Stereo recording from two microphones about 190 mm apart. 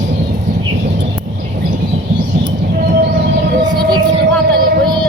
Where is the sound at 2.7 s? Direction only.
50° right (ahead or behind).